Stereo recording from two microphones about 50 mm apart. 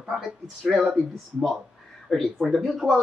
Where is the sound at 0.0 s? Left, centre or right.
Centre.